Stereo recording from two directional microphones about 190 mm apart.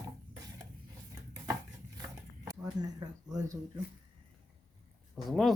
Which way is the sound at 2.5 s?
20° right (ahead or behind).